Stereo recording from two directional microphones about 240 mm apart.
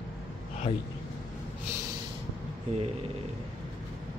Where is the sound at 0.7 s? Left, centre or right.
Left.